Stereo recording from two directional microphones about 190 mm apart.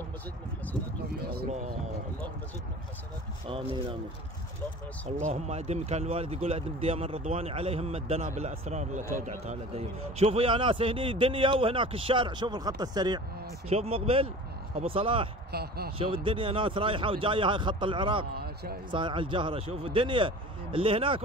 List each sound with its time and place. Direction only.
1.2 s speech: 55° right (ahead or behind)
3.4 s a man's voice: 30° right (ahead or behind)
5.2 s a man's voice: 35° right (ahead or behind)
15.5 s speech: 55° right (ahead or behind)
16.3 s a man's voice: 25° right (ahead or behind)
18.3 s a man's voice: 55° right (ahead or behind)
18.9 s a man's voice: 25° right (ahead or behind)